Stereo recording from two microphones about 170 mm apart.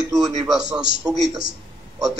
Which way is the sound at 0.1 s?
Centre (ahead or behind).